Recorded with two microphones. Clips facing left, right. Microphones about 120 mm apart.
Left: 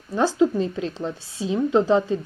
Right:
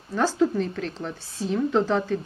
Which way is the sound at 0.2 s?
15° left (ahead or behind).